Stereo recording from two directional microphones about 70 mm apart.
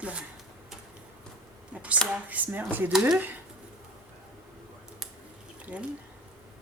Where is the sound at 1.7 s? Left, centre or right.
Centre.